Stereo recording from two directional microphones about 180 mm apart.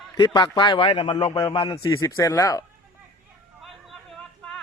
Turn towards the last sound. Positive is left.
turn(degrees=5)  # may be behind; listen again after turning